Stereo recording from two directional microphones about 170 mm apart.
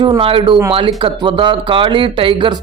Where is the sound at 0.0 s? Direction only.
30° right (ahead or behind).